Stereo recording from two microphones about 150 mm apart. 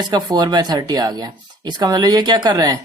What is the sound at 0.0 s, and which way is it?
Speech, 25° right (ahead or behind).